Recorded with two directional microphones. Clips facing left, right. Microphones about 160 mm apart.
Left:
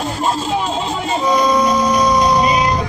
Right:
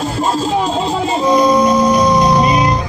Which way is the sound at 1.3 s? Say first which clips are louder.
Right 4 dB; 5° right (ahead or behind).